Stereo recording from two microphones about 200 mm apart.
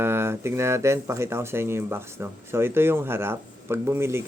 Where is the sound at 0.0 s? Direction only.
10° right (ahead or behind).